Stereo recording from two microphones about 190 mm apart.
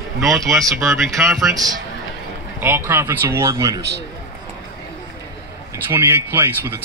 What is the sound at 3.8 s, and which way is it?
Speech, 60° right (ahead or behind).